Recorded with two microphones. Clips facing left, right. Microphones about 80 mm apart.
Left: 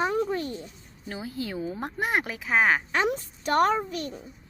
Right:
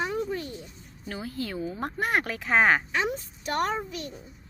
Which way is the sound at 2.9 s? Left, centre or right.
Left.